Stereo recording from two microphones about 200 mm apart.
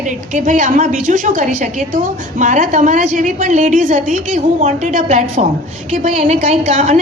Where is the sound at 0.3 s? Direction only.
40° right (ahead or behind).